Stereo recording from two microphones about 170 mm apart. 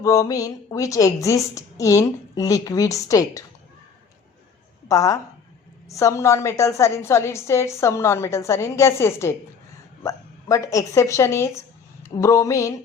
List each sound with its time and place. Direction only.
0.0 s a woman's voice: 20° left (ahead or behind)
4.9 s a woman's voice: 20° left (ahead or behind)